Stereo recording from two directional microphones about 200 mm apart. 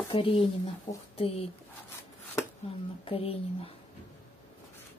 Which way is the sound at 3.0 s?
30° left (ahead or behind).